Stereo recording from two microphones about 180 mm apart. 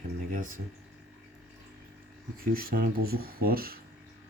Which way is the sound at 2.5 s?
55° right (ahead or behind).